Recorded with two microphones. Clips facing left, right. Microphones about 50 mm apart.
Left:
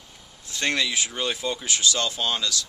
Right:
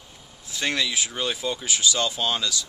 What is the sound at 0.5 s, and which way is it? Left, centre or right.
Speech, centre.